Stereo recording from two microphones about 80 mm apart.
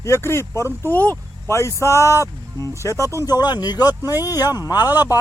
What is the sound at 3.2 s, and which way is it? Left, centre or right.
Speech, left.